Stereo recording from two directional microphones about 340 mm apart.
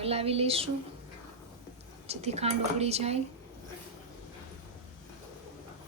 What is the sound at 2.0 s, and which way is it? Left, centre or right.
A woman's voice, centre.